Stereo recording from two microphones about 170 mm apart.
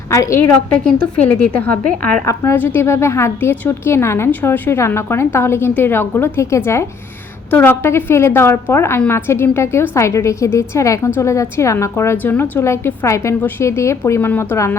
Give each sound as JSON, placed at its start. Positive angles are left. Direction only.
{"t": 0.3, "sound": "a woman's voice", "side_deg": 10}